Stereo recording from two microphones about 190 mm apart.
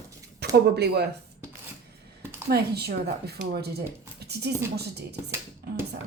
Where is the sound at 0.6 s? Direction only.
60° right (ahead or behind).